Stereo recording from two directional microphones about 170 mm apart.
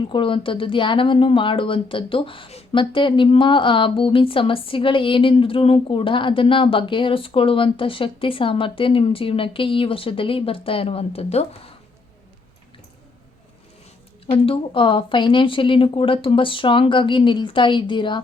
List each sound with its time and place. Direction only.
0.0 s speech: 30° left (ahead or behind)
14.3 s speech: 30° left (ahead or behind)